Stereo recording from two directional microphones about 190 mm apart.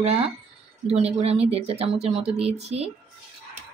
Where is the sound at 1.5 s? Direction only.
35° right (ahead or behind).